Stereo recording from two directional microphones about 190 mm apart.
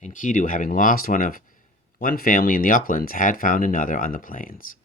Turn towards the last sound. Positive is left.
turn(degrees=45)  # may be behind; listen again after turning